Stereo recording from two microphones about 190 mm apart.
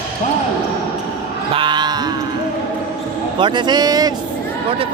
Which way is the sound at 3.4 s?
25° right (ahead or behind).